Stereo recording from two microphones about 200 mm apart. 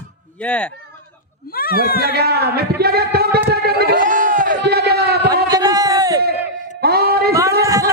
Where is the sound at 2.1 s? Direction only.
55° right (ahead or behind).